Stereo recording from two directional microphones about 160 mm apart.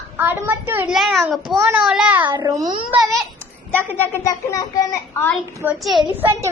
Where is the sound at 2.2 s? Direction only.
30° right (ahead or behind).